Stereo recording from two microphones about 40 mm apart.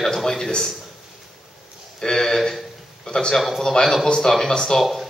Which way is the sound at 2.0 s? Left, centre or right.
Centre.